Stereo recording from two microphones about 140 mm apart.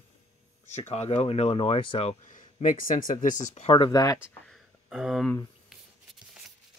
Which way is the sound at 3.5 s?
45° left (ahead or behind).